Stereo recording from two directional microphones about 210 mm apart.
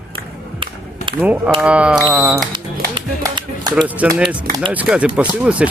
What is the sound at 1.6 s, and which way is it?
Speech, 5° right (ahead or behind).